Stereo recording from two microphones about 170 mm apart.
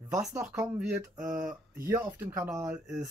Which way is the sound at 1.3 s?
50° right (ahead or behind).